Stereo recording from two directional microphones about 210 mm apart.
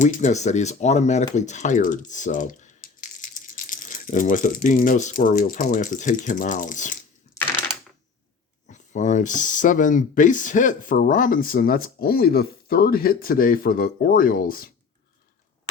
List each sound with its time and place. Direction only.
0.0 s speech: 35° left (ahead or behind)
8.6 s speech: 35° left (ahead or behind)